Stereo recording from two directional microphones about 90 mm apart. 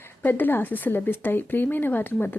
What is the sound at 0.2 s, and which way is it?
A woman's voice, 20° left (ahead or behind).